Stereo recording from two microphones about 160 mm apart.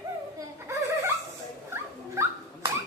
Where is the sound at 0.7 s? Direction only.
20° right (ahead or behind).